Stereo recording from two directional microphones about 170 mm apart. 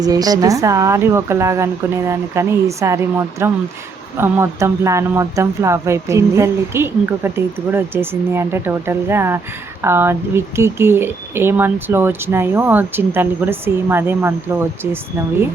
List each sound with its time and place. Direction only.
0.0 s speech: 20° right (ahead or behind)